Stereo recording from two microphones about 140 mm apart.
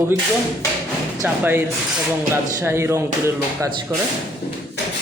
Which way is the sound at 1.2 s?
15° right (ahead or behind).